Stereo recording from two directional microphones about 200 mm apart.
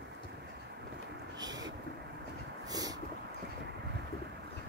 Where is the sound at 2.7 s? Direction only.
20° right (ahead or behind).